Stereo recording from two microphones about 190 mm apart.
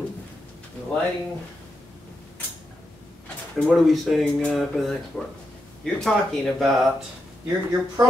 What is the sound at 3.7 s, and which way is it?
Speech, centre (ahead or behind).